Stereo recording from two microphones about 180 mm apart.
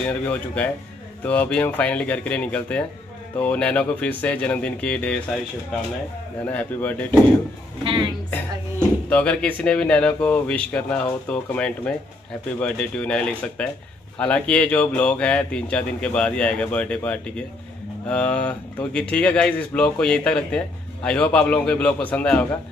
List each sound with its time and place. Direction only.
0.2 s speech: 10° left (ahead or behind)
6.4 s speech: 10° left (ahead or behind)
7.8 s a woman's voice: 30° right (ahead or behind)
9.1 s speech: 5° left (ahead or behind)